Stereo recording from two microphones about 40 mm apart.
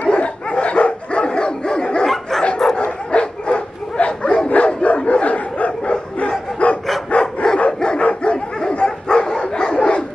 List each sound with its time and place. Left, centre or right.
0.0 s dog: left
4.5 s bow-wow: left
7.1 s dog: left